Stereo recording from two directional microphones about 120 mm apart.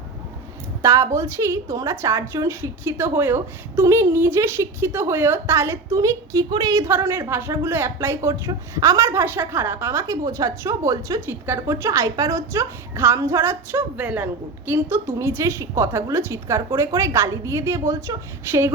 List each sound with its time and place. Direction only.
0.8 s a woman's voice: 25° right (ahead or behind)
6.9 s speech: 20° right (ahead or behind)